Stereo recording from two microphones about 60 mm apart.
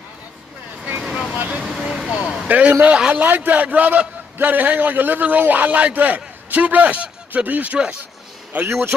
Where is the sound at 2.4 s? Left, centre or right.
Right.